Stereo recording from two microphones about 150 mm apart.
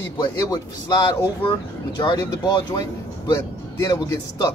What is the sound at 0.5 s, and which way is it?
Speech, 25° left (ahead or behind).